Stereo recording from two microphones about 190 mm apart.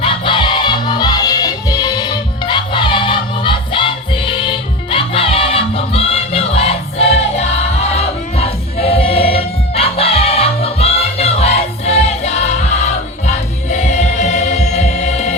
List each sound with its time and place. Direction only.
0.0 s music: 25° left (ahead or behind)